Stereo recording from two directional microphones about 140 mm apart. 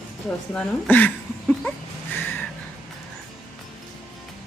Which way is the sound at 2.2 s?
15° left (ahead or behind).